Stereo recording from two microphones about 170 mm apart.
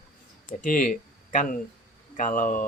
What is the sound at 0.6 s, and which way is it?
Speech, 50° left (ahead or behind).